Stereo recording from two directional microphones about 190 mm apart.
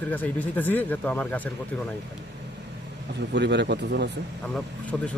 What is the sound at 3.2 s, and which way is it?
Speech, 65° right (ahead or behind).